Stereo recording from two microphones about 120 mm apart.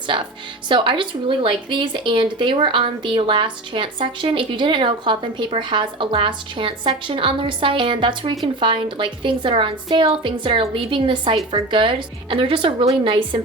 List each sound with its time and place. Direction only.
0.7 s a woman's voice: 45° right (ahead or behind)